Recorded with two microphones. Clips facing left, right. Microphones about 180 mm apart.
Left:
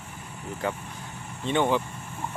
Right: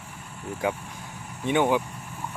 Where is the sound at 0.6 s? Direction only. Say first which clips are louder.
Right 3 dB; 10° right (ahead or behind).